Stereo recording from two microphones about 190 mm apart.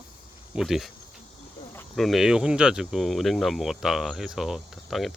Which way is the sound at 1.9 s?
Centre (ahead or behind).